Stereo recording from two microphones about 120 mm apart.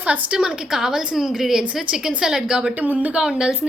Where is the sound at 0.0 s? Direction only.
10° right (ahead or behind).